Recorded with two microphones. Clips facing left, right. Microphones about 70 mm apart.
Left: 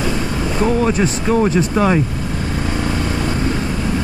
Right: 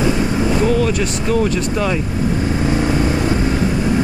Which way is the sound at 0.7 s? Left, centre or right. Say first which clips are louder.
Left 1 dB; left.